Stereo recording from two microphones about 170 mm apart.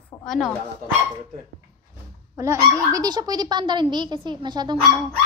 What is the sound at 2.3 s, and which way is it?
A woman's voice, 15° right (ahead or behind).